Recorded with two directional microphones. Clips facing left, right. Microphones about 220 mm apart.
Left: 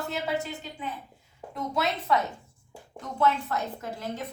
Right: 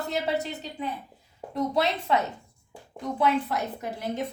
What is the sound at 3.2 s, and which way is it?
A woman's voice, 15° right (ahead or behind).